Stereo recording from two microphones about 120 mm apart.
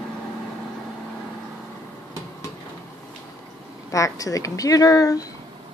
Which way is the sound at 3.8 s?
25° left (ahead or behind).